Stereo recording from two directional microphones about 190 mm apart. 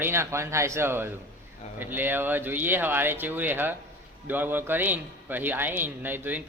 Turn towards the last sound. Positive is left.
turn(degrees=-10)  # may be behind; listen again after turning